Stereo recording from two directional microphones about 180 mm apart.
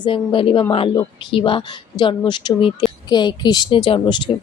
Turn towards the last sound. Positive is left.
turn(degrees=25)  # may be behind; listen again after turning